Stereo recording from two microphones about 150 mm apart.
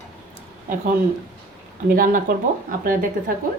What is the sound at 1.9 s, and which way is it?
A woman's voice, 65° right (ahead or behind).